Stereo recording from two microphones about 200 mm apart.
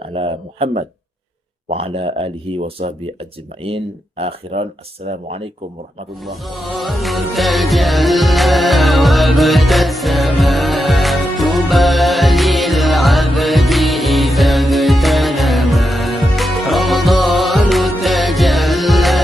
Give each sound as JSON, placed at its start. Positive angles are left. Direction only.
{"t": 0.0, "sound": "speech", "side_deg": -30}
{"t": 4.2, "sound": "speech", "side_deg": -30}
{"t": 6.2, "sound": "music", "side_deg": 0}